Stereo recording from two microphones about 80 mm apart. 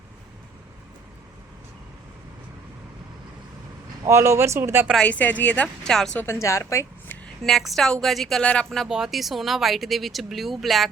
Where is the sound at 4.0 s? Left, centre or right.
Right.